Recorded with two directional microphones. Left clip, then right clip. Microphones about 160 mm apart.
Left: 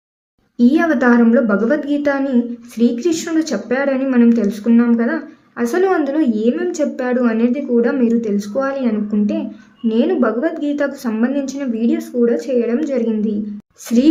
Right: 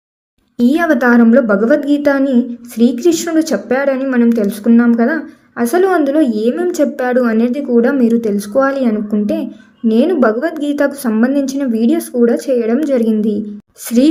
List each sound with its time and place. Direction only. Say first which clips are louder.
0.5 s a woman's voice: right 2 dB; 30° right (ahead or behind)